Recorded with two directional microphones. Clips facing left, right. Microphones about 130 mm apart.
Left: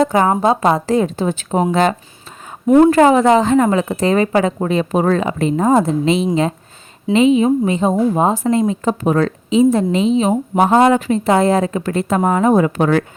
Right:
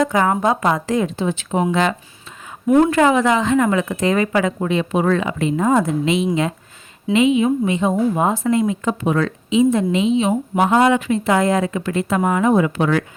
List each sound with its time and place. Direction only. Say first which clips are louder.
0.0 s speech: left 3 dB; 30° left (ahead or behind)